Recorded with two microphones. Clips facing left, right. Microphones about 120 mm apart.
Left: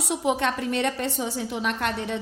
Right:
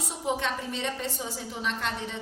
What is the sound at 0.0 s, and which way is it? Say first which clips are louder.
A woman's voice: left 6 dB; 75° left (ahead or behind).